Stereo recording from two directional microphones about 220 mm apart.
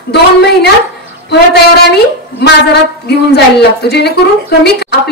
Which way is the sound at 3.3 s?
50° left (ahead or behind).